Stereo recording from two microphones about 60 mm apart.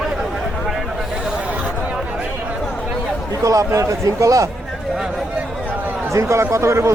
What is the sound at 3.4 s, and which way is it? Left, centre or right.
A man's voice, right.